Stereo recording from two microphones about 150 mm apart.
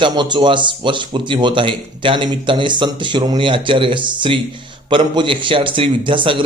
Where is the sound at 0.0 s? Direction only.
30° right (ahead or behind).